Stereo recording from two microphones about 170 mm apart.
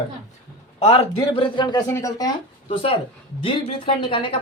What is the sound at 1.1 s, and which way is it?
A woman's voice, 25° left (ahead or behind).